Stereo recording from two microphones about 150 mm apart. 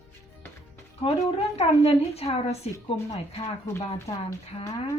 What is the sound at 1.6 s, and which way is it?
A woman's voice, 45° left (ahead or behind).